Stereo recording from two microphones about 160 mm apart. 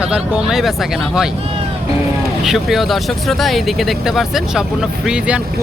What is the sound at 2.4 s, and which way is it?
Speech, centre (ahead or behind).